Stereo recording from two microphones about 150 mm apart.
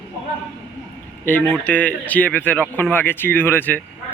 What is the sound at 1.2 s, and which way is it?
Speech, 15° left (ahead or behind).